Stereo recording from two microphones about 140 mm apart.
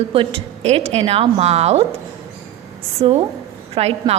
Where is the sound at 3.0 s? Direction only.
40° right (ahead or behind).